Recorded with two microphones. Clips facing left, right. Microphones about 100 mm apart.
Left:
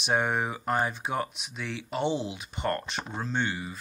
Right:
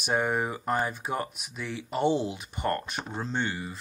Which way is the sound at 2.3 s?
15° left (ahead or behind).